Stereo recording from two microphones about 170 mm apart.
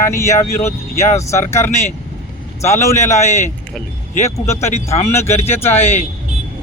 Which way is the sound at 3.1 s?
40° left (ahead or behind).